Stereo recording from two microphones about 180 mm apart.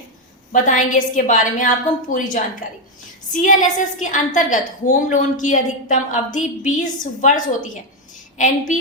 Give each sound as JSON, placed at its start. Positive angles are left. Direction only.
{"t": 0.5, "sound": "a woman's voice", "side_deg": 45}